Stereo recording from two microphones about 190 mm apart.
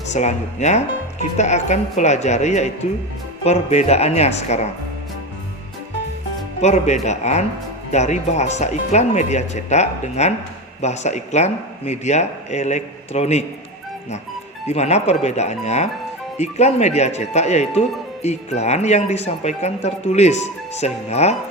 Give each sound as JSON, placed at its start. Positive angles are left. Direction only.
{"t": 0.1, "sound": "speech", "side_deg": 35}
{"t": 6.6, "sound": "speech", "side_deg": 35}
{"t": 14.7, "sound": "speech", "side_deg": 35}